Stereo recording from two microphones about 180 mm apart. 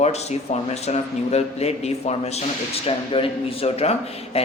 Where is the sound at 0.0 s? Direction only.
35° left (ahead or behind).